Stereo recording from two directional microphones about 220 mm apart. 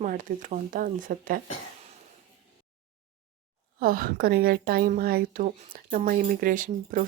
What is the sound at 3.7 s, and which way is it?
A woman's voice, 40° right (ahead or behind).